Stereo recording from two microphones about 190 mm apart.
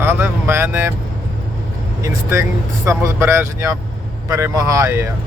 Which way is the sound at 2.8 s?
15° right (ahead or behind).